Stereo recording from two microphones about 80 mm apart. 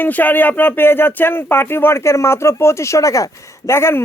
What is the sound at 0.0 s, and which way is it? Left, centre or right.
Speech, left.